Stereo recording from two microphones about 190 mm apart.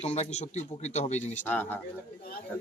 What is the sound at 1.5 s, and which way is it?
Speech, 10° left (ahead or behind).